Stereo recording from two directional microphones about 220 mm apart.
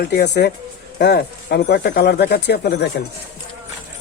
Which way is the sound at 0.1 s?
50° left (ahead or behind).